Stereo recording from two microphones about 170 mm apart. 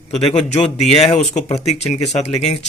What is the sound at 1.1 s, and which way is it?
Speech, 40° left (ahead or behind).